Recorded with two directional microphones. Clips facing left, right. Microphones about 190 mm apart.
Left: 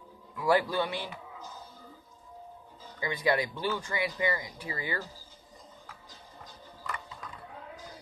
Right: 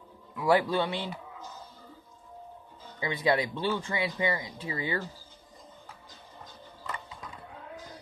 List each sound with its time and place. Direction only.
0.4 s speech: 20° right (ahead or behind)
3.0 s speech: 25° right (ahead or behind)